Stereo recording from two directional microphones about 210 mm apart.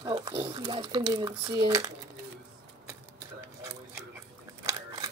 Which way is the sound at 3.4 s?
10° right (ahead or behind).